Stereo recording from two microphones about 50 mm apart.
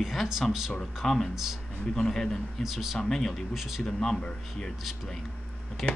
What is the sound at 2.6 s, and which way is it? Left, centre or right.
Speech, centre.